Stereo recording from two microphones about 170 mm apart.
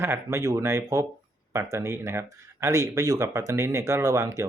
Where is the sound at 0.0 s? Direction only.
15° right (ahead or behind).